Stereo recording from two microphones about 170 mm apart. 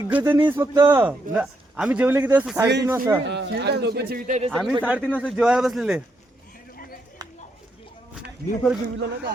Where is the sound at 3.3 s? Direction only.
90° right; by 4.2 s 70° right (ahead or behind).